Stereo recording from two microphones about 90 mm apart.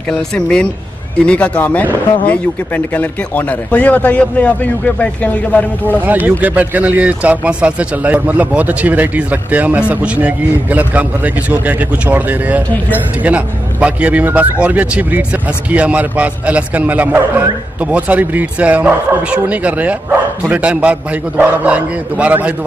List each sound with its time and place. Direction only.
0.1 s speech: 10° left (ahead or behind)
6.0 s speech: 20° right (ahead or behind)